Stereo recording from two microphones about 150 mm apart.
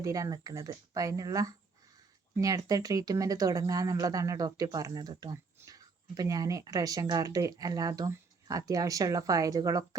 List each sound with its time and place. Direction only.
0.0 s speech: 20° right (ahead or behind)